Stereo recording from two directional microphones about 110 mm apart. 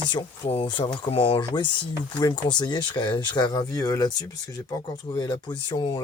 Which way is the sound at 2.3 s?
40° left (ahead or behind).